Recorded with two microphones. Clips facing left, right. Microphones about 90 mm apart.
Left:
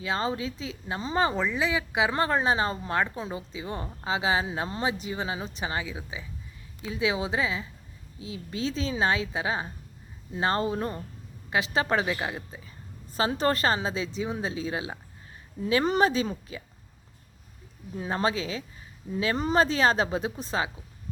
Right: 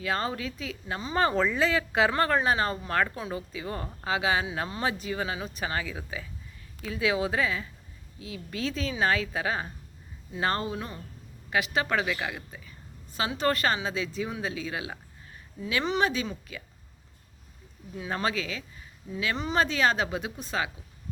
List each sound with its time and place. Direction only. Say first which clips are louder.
0.0 s a woman's voice: left 1 dB; 20° left (ahead or behind); by 11.0 s 40° left (ahead or behind)
11.5 s a woman's voice: left 1 dB; 30° left (ahead or behind)
15.6 s a woman's voice: left 4 dB; 45° left (ahead or behind)
17.9 s a woman's voice: left 2 dB; 35° left (ahead or behind)